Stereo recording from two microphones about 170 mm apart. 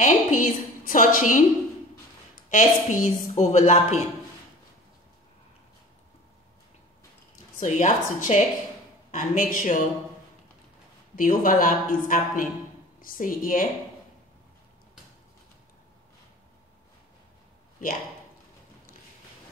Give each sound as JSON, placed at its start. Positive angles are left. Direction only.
{"t": 0.0, "sound": "a woman's voice", "side_deg": 50}
{"t": 2.5, "sound": "a woman's voice", "side_deg": 45}
{"t": 7.6, "sound": "a woman's voice", "side_deg": 45}
{"t": 11.1, "sound": "a woman's voice", "side_deg": 55}